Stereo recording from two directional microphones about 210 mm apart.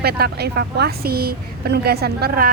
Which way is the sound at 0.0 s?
50° right (ahead or behind).